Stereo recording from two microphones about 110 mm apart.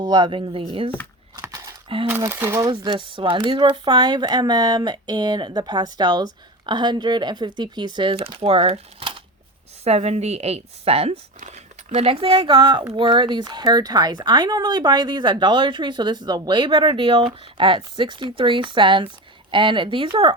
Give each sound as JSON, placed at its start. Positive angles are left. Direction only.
{"t": 0.0, "sound": "speech", "side_deg": -45}
{"t": 1.4, "sound": "a sound", "side_deg": -30}
{"t": 2.0, "sound": "speech", "side_deg": -20}
{"t": 2.6, "sound": "speech", "side_deg": -45}
{"t": 8.3, "sound": "speech", "side_deg": -55}
{"t": 9.8, "sound": "speech", "side_deg": -80}